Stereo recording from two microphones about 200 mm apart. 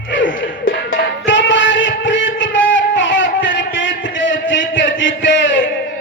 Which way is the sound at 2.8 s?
65° left (ahead or behind).